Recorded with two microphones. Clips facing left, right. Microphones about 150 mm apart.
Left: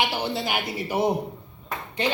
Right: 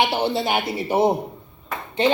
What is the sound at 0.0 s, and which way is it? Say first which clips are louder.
A woman's voice: right 5 dB; 25° right (ahead or behind).